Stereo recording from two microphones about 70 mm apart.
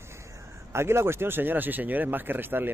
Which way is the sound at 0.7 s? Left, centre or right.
Right.